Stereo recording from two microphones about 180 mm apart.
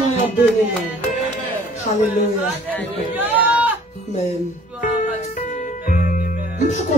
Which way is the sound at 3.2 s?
10° right (ahead or behind).